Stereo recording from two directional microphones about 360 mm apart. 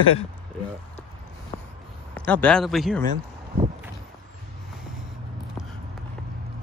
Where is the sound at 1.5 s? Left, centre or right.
Centre.